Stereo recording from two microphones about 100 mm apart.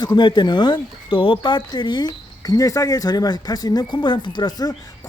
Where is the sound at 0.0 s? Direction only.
45° left (ahead or behind).